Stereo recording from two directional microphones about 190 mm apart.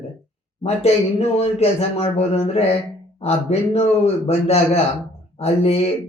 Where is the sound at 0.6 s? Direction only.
35° left (ahead or behind).